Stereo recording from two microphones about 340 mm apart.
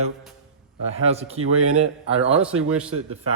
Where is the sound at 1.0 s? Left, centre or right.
Centre.